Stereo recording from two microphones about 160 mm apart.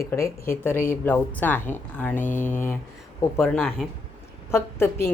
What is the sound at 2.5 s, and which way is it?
Speech, 15° left (ahead or behind).